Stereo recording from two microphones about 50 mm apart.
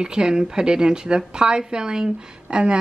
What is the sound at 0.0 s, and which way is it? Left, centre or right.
A woman's voice, centre.